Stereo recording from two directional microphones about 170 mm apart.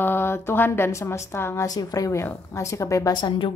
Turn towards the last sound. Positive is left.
turn(degrees=30)  # may be behind; listen again after turning